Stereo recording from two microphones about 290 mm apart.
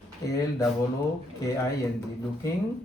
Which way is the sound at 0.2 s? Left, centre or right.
Centre.